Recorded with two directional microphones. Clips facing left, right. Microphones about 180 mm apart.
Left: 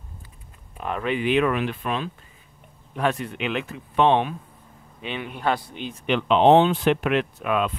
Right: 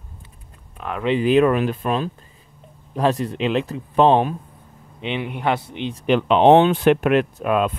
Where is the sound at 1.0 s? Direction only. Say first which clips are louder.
Right 6 dB; 35° right (ahead or behind).